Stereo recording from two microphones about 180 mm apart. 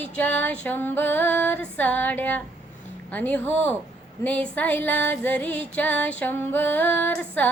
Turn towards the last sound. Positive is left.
turn(degrees=10)  # may be behind; listen again after turning